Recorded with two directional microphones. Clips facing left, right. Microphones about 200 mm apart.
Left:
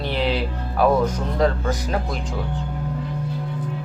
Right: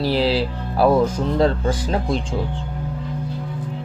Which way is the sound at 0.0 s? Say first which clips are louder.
Right 4 dB; 35° right (ahead or behind).